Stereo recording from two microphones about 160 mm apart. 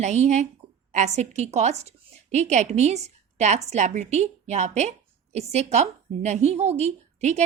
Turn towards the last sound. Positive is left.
turn(degrees=-45)  # may be behind; listen again after turning